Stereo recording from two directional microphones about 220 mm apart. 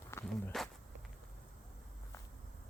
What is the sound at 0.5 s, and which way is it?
Speech, centre (ahead or behind).